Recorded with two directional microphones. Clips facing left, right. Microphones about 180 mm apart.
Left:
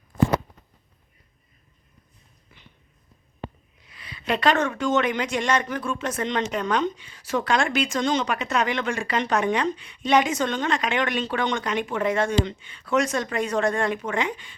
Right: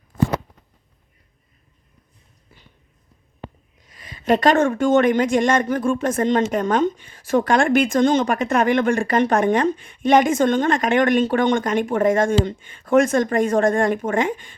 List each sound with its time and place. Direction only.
3.8 s speech: 45° right (ahead or behind)